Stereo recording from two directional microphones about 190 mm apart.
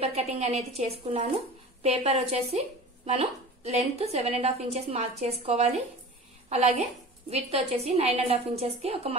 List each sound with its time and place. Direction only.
0.0 s a woman's voice: 35° right (ahead or behind)